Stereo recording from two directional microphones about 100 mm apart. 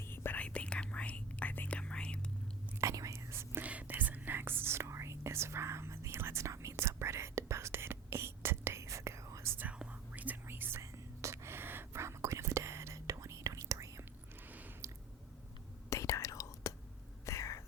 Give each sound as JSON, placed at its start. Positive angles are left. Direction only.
{"t": 0.0, "sound": "whispering", "side_deg": 25}
{"t": 2.8, "sound": "whispering", "side_deg": -30}
{"t": 15.9, "sound": "whispering", "side_deg": 30}